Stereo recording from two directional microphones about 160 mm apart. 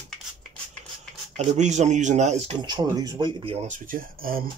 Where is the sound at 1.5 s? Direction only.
45° right (ahead or behind).